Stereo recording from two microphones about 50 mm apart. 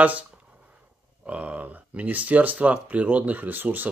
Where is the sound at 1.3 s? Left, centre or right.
Right.